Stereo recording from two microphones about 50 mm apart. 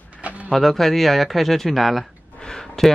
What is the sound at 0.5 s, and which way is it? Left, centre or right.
Speech, centre.